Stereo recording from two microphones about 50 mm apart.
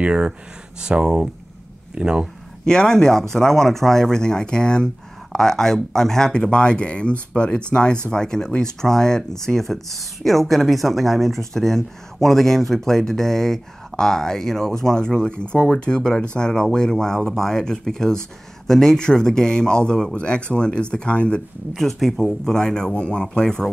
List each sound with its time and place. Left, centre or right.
0.0 s speech: right
2.6 s speech: centre
21.7 s speech: centre